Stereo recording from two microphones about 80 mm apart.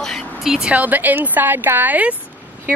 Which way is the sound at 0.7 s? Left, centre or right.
Right.